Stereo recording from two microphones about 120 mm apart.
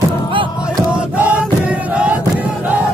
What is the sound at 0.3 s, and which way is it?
Music, 45° right (ahead or behind).